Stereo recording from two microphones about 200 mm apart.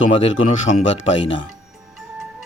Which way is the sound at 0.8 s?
70° left (ahead or behind).